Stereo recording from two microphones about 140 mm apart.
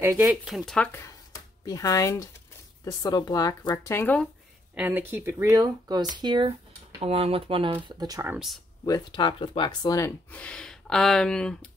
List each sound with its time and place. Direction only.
0.0 s speech: 20° right (ahead or behind)
0.3 s speech: 5° right (ahead or behind)
0.7 s speech: 20° left (ahead or behind)
4.7 s speech: 10° right (ahead or behind); by 6.5 s 35° right (ahead or behind)
7.0 s speech: 45° right (ahead or behind)
8.8 s speech: 30° left (ahead or behind)
10.3 s speech: 10° left (ahead or behind)